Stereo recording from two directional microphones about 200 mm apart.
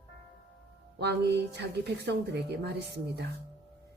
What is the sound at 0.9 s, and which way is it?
Speech, 55° right (ahead or behind).